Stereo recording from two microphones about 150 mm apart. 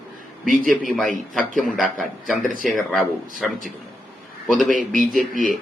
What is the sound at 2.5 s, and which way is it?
Speech, 65° right (ahead or behind).